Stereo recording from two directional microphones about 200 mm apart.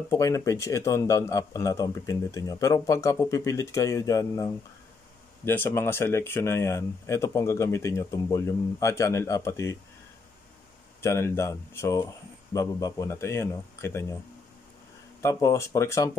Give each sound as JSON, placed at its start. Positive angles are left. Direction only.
{"t": 0.1, "sound": "speech", "side_deg": 15}
{"t": 11.0, "sound": "speech", "side_deg": 15}
{"t": 15.2, "sound": "speech", "side_deg": 15}